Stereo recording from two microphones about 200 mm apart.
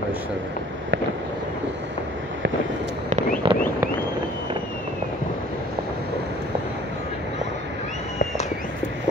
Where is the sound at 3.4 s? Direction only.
25° right (ahead or behind).